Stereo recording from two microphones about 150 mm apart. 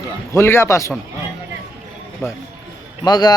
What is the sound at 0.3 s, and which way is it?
Speech, 15° left (ahead or behind).